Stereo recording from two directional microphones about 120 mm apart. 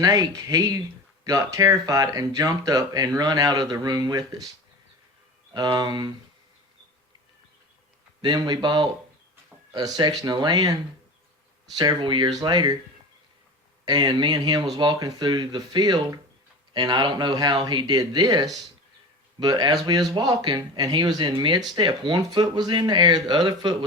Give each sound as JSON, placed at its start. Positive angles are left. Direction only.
{"t": 0.0, "sound": "speech", "side_deg": -30}
{"t": 5.5, "sound": "speech", "side_deg": -35}
{"t": 8.2, "sound": "speech", "side_deg": -35}
{"t": 11.8, "sound": "speech", "side_deg": -35}
{"t": 13.8, "sound": "speech", "side_deg": -40}